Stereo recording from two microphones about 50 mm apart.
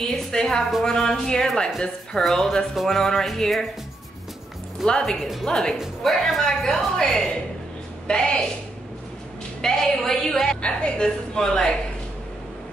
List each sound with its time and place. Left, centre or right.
0.0 s a woman's voice: centre
4.8 s a woman's voice: centre
8.1 s a woman's voice: centre
9.6 s a woman's voice: centre
10.6 s a woman's voice: left
11.3 s a woman's voice: centre